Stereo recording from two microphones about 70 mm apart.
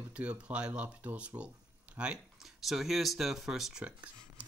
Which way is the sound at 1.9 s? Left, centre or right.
Centre.